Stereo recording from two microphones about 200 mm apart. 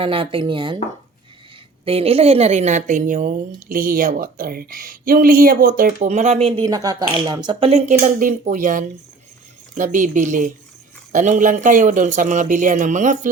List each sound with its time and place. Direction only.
0.0 s speech: 25° right (ahead or behind)
1.8 s a woman's voice: 30° right (ahead or behind)
6.7 s speech: 20° right (ahead or behind)
7.7 s a woman's voice: 35° right (ahead or behind)